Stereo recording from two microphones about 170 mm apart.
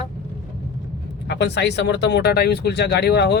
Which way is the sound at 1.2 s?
85° left.